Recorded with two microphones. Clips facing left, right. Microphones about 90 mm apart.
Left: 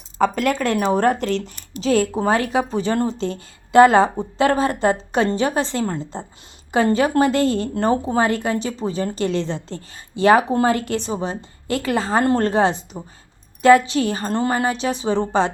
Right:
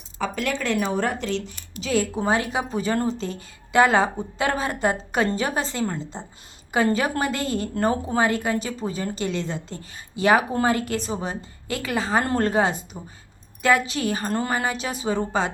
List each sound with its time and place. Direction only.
0.2 s a woman's voice: 45° left (ahead or behind)
5.7 s a woman's voice: 40° left (ahead or behind)
6.7 s a woman's voice: 30° left (ahead or behind)